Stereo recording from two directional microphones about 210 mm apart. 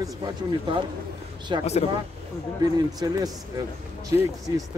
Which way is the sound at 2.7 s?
20° right (ahead or behind).